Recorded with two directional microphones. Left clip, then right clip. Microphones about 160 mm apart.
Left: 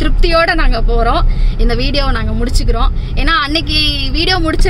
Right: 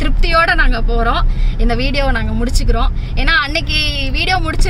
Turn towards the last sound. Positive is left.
turn(degrees=25)  # may be behind; listen again after turning